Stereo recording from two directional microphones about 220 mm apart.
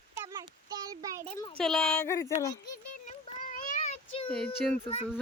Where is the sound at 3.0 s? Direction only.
35° left (ahead or behind).